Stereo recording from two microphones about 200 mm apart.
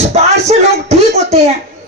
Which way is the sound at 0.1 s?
35° right (ahead or behind).